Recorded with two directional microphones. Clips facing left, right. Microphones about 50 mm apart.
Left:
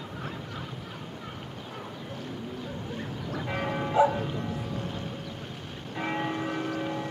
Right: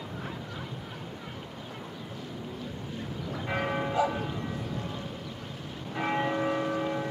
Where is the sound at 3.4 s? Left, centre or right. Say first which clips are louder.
Right 1 dB; centre.